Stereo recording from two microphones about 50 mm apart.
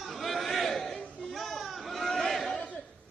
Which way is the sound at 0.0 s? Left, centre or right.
Centre.